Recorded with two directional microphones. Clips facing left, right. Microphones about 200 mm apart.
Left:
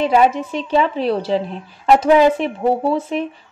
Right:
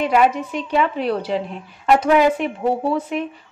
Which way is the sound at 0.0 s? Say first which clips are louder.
Left 2 dB; 30° left (ahead or behind).